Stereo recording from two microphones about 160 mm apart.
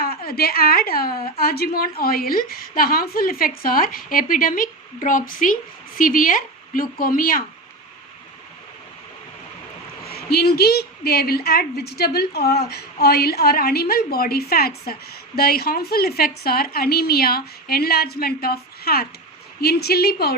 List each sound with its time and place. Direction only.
0.0 s a woman's voice: 70° left (ahead or behind)
10.1 s a woman's voice: 75° left (ahead or behind)